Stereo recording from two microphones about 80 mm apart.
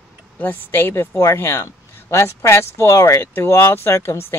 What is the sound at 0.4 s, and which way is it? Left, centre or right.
Speech, left.